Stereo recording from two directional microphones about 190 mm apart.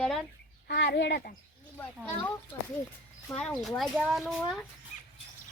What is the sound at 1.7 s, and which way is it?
Speech, 10° left (ahead or behind).